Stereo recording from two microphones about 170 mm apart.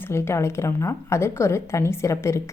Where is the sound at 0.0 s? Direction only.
15° left (ahead or behind).